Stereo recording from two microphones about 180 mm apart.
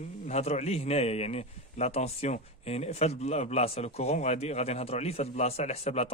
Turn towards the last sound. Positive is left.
turn(degrees=35)  # may be behind; listen again after turning